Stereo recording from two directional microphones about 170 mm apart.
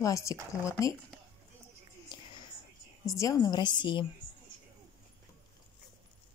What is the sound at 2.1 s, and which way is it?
Whispering, 25° left (ahead or behind).